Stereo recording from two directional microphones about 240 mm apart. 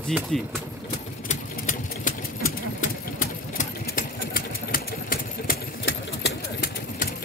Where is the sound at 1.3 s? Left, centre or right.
Left.